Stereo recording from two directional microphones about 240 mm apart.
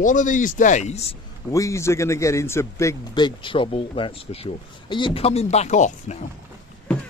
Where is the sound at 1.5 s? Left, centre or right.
Centre; by 6.1 s left.